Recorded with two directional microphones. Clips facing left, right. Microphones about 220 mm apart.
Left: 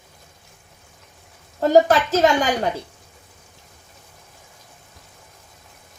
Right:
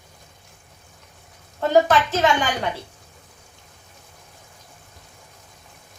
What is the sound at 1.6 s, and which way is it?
A woman's voice, 40° left (ahead or behind).